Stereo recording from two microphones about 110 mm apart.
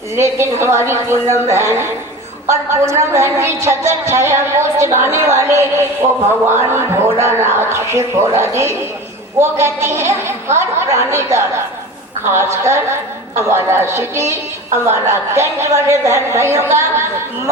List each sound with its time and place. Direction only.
0.2 s a woman's voice: 25° right (ahead or behind)